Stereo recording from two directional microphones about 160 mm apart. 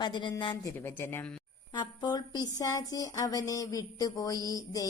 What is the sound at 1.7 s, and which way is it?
Speech, 30° left (ahead or behind).